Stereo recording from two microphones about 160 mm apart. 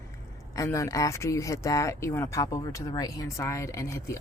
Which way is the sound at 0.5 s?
20° left (ahead or behind).